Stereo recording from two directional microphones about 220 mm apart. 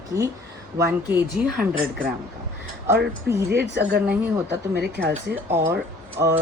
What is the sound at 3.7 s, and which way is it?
Speech, 50° right (ahead or behind).